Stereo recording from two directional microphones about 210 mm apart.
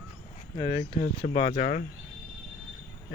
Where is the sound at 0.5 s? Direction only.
20° left (ahead or behind); by 1.8 s 40° left (ahead or behind).